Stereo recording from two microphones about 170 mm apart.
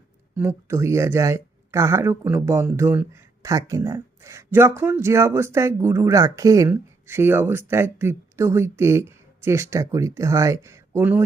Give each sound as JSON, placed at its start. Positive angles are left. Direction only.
{"t": 0.3, "sound": "speech", "side_deg": -15}